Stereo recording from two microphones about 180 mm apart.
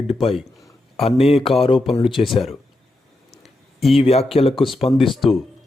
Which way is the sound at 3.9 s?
35° left (ahead or behind).